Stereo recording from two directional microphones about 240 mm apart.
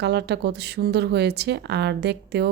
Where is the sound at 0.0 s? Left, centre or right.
Right.